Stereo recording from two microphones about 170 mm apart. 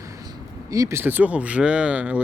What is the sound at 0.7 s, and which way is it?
Speech, 15° right (ahead or behind).